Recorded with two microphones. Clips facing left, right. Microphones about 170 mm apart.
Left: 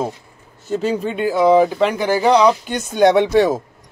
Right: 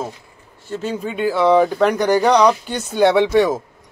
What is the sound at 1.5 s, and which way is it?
Speech, 10° left (ahead or behind).